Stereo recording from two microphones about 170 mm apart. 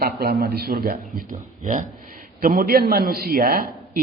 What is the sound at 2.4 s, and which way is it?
Speech, 55° right (ahead or behind).